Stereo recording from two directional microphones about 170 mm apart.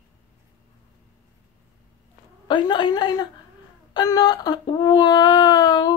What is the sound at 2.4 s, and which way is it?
Speech, 25° left (ahead or behind).